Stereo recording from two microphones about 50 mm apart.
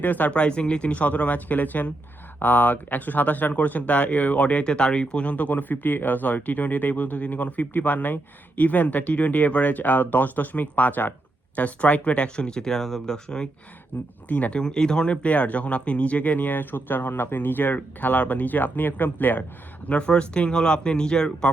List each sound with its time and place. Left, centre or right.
0.0 s speech: left
0.3 s speech: left
13.9 s speech: left
14.6 s speech: centre; by 19.5 s left
19.9 s speech: left